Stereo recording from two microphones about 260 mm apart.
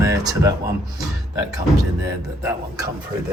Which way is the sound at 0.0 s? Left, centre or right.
Centre.